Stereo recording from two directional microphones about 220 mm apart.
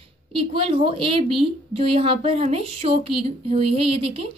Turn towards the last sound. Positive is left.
turn(degrees=-25)  # may be behind; listen again after turning